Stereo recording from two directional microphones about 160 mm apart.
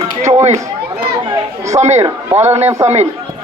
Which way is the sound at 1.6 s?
45° right (ahead or behind).